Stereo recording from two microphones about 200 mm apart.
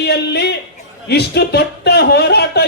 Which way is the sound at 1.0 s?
55° left (ahead or behind).